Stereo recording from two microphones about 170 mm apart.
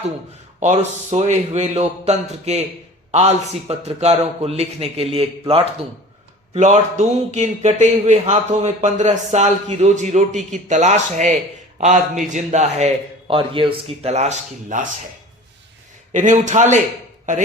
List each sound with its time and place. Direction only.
0.6 s a man's voice: 40° right (ahead or behind)
16.1 s a man's voice: 45° right (ahead or behind)